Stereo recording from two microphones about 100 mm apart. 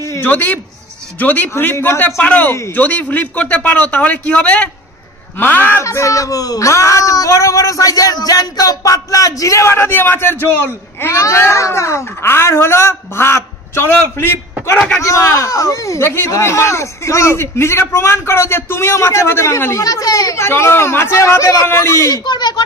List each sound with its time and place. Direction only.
0.2 s a man's voice: 15° left (ahead or behind)
22.2 s speech: 45° left (ahead or behind)